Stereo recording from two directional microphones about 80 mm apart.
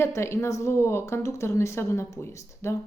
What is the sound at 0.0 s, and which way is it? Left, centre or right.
A woman's voice, left.